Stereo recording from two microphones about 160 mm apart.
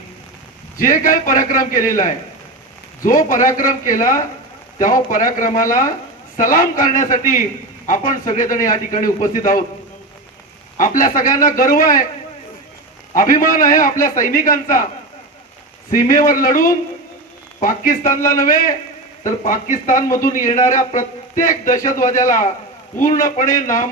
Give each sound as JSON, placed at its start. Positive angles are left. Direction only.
{"t": 0.8, "sound": "a man's voice", "side_deg": 60}
{"t": 10.8, "sound": "a man's voice", "side_deg": 55}
{"t": 13.1, "sound": "a man's voice", "side_deg": 60}
{"t": 15.9, "sound": "a man's voice", "side_deg": 60}
{"t": 18.2, "sound": "a man's voice", "side_deg": 20}
{"t": 18.4, "sound": "a man's voice", "side_deg": 55}